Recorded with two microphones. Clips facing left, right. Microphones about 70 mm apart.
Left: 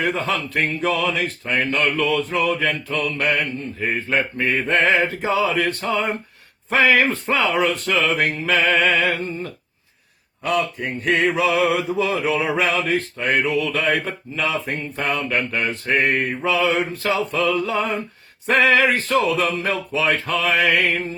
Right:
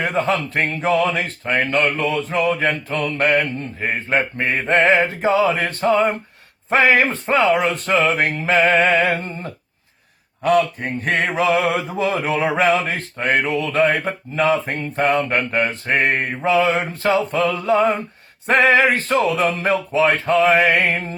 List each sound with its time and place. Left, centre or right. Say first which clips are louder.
0.0 s mantra: right 3 dB; right
1.8 s speech: even; right
2.4 s mantra: right 2 dB; right
6.7 s speech: right 1 dB; right
11.0 s mantra: even; right
18.4 s speech: right 2 dB; right